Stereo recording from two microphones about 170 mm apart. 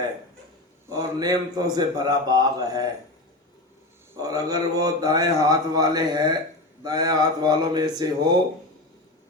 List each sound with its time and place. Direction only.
0.9 s speech: 20° right (ahead or behind)
4.2 s speech: 20° right (ahead or behind)